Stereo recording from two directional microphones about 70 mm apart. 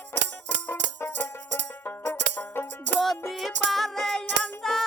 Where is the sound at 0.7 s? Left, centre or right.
Left.